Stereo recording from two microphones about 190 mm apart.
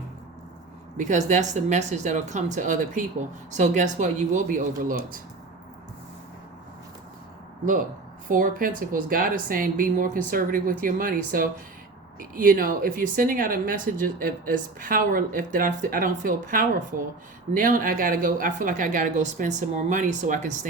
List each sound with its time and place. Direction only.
0.9 s a woman's voice: 40° right (ahead or behind)
7.6 s speech: 45° right (ahead or behind)